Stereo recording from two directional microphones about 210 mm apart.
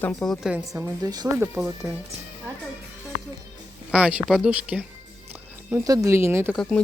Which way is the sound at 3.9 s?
5° right (ahead or behind).